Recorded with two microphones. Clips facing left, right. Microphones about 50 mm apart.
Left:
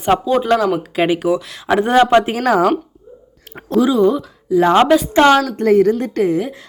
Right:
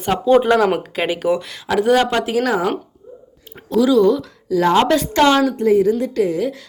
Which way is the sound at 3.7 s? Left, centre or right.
Left.